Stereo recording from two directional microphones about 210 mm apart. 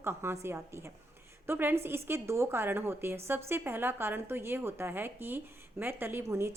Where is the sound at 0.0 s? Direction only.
10° right (ahead or behind).